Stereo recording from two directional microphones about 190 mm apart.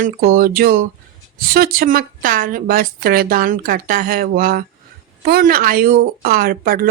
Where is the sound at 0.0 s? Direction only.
50° right (ahead or behind).